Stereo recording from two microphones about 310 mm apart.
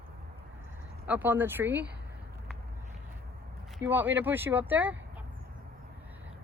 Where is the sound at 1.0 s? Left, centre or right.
Centre.